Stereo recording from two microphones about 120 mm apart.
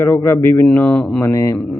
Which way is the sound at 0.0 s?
20° left (ahead or behind).